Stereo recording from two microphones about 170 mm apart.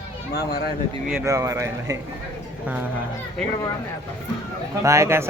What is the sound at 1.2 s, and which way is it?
Speech, 20° right (ahead or behind).